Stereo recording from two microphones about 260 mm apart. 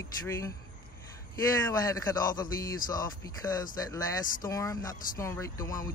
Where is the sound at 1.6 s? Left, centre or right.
Centre.